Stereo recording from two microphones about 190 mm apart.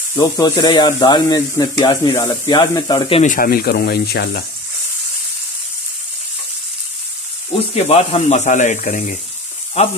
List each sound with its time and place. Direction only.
0.1 s speech: 15° left (ahead or behind)
3.2 s speech: 45° left (ahead or behind)
7.7 s speech: 30° left (ahead or behind)